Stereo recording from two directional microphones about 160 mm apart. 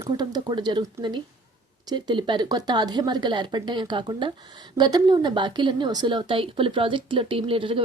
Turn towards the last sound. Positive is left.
turn(degrees=-35)  # may be behind; listen again after turning